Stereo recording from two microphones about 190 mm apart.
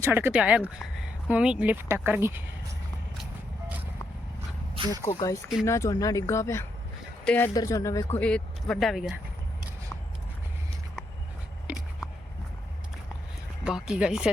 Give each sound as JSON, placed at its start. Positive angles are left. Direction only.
{"t": 0.0, "sound": "speech", "side_deg": -10}
{"t": 4.7, "sound": "dog", "side_deg": -25}
{"t": 5.0, "sound": "speech", "side_deg": 15}
{"t": 8.2, "sound": "speech", "side_deg": 5}
{"t": 11.7, "sound": "a sound", "side_deg": -5}
{"t": 13.7, "sound": "speech", "side_deg": -5}